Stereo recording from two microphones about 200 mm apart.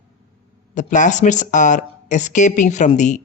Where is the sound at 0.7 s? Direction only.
40° left (ahead or behind).